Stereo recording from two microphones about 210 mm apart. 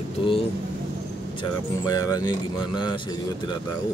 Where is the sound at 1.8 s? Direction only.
20° left (ahead or behind).